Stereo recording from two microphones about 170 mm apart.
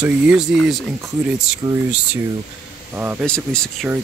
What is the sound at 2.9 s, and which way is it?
Speech, 10° right (ahead or behind).